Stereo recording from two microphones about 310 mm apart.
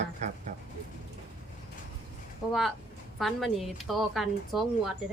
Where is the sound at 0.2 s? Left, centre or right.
Right.